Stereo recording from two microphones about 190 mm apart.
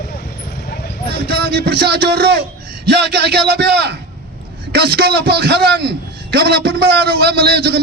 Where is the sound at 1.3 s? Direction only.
60° right (ahead or behind).